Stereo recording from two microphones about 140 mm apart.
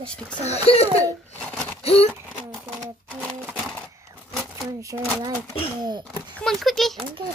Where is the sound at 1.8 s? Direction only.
45° left (ahead or behind).